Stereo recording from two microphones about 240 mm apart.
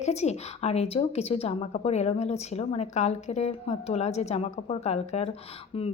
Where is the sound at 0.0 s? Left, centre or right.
Left.